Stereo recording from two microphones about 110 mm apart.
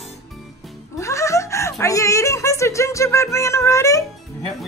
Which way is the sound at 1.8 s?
30° left (ahead or behind).